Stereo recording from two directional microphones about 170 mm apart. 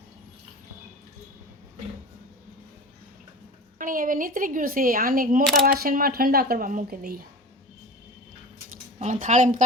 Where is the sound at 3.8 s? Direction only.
55° right (ahead or behind).